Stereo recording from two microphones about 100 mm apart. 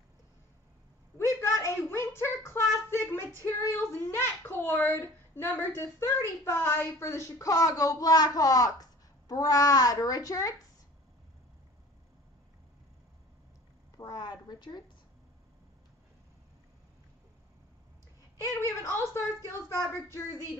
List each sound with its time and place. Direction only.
1.1 s a sound: 30° left (ahead or behind)
3.7 s a child's voice: 25° left (ahead or behind)
13.9 s speech: 40° left (ahead or behind)
18.6 s a child's voice: 30° left (ahead or behind)